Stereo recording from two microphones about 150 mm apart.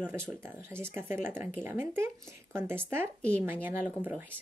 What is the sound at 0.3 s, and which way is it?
Speech, 15° right (ahead or behind).